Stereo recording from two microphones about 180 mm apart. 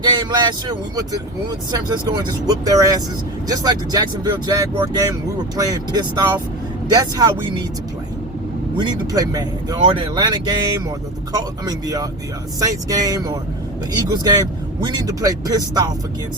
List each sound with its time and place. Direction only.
0.0 s speech: 25° right (ahead or behind)
8.8 s speech: 20° right (ahead or behind)